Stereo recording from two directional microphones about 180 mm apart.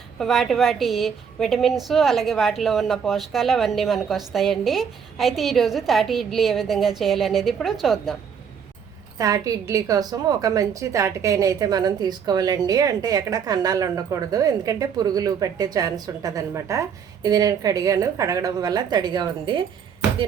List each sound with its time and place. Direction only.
0.2 s a woman's voice: centre (ahead or behind)
9.1 s a woman's voice: 20° right (ahead or behind)